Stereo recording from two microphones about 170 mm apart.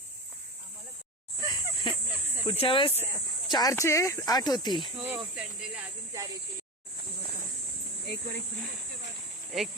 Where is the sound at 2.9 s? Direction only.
15° right (ahead or behind).